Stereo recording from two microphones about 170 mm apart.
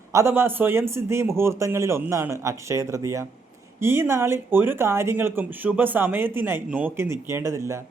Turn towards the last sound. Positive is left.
turn(degrees=-15)  # may be behind; listen again after turning